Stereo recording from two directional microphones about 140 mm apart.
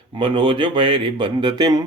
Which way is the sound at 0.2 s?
35° right (ahead or behind).